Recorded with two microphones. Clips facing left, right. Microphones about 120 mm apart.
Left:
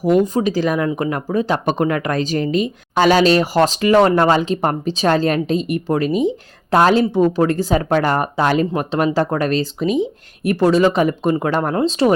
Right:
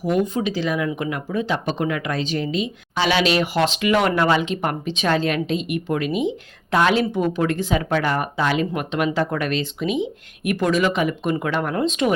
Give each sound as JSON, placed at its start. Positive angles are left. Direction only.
{"t": 0.0, "sound": "speech", "side_deg": 40}